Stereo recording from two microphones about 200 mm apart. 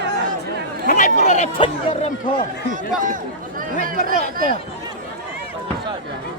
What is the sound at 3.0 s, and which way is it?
Speech, 40° right (ahead or behind).